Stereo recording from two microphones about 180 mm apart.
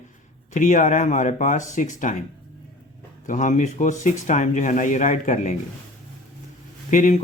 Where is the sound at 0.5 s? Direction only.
45° left (ahead or behind).